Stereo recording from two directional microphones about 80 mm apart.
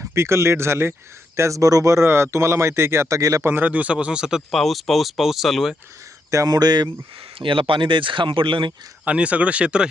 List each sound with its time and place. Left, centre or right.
0.0 s speech: right
3.4 s speech: right; by 5.7 s centre
6.3 s speech: right
7.4 s speech: right
9.0 s speech: centre